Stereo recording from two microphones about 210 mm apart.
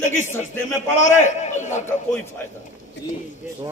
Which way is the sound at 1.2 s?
35° left (ahead or behind).